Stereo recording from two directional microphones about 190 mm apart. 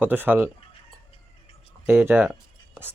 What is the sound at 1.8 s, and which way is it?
Speech, 10° right (ahead or behind).